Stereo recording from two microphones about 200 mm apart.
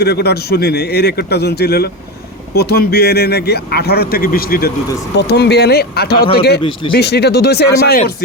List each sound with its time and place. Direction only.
0.0 s speech: 55° left (ahead or behind)
6.6 s speech: 25° left (ahead or behind)
6.9 s speech: 55° left (ahead or behind)